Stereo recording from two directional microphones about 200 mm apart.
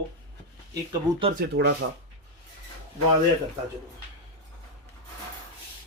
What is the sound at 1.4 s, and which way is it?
Speech, 55° right (ahead or behind).